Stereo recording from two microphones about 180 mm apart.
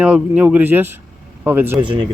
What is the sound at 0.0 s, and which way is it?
Speech, 5° right (ahead or behind).